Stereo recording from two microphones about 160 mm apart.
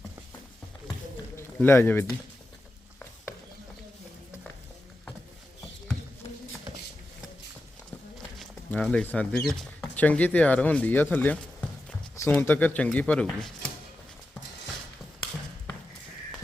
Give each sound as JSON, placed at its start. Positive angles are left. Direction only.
{"t": 1.4, "sound": "speech", "side_deg": 15}
{"t": 8.4, "sound": "speech", "side_deg": 5}